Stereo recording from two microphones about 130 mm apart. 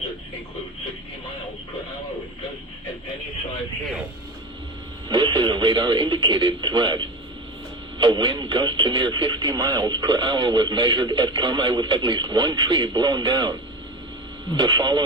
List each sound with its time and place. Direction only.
5.0 s speech: 35° right (ahead or behind)